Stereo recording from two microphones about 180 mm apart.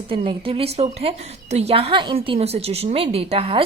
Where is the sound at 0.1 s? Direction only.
30° right (ahead or behind).